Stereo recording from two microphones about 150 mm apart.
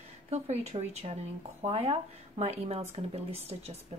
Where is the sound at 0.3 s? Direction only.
45° right (ahead or behind).